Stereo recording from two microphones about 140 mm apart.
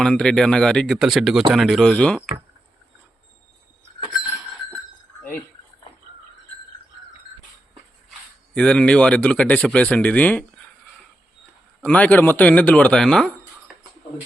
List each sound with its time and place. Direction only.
0.0 s speech: 5° left (ahead or behind)
8.5 s speech: 5° left (ahead or behind)
11.8 s speech: 10° left (ahead or behind)